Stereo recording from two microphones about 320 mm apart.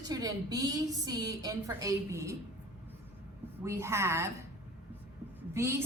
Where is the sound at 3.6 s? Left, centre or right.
Centre.